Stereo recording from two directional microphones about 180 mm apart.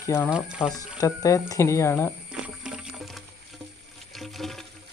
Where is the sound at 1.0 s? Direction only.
20° left (ahead or behind).